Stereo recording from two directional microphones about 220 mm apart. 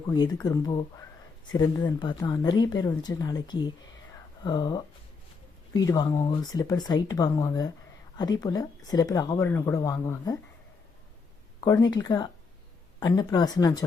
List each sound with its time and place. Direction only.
0.4 s speech: 15° left (ahead or behind)
11.9 s speech: 15° left (ahead or behind)